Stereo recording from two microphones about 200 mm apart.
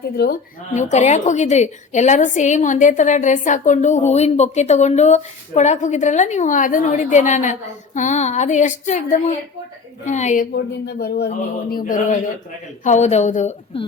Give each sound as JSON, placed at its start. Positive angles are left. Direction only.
{"t": 0.2, "sound": "a woman's voice", "side_deg": 50}
{"t": 0.7, "sound": "a woman's voice", "side_deg": 35}
{"t": 10.5, "sound": "speech", "side_deg": 55}
{"t": 11.7, "sound": "a woman's voice", "side_deg": 45}